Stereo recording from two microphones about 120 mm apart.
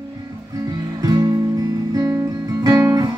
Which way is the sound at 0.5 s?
30° right (ahead or behind).